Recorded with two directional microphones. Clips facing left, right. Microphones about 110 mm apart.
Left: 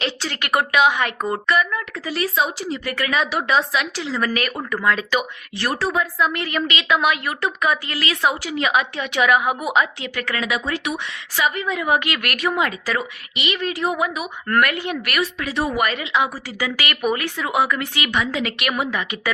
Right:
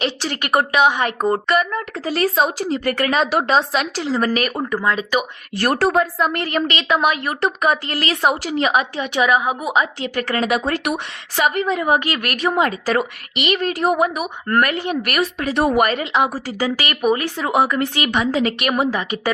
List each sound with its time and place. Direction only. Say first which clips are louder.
0.0 s a sound: right 3 dB; 30° right (ahead or behind)
0.7 s a woman's voice: left 1 dB; 30° right (ahead or behind)
2.0 s a woman's voice: right 4 dB; 50° right (ahead or behind); by 4.9 s 30° right (ahead or behind)
5.5 s a woman's voice: right 5 dB; 55° right (ahead or behind); by 9.6 s 25° right (ahead or behind)
10.0 s speech: right 5 dB; 35° right (ahead or behind)
11.6 s a woman's voice: right 3 dB; 35° right (ahead or behind)
14.4 s a woman's voice: right 1 dB; 30° right (ahead or behind)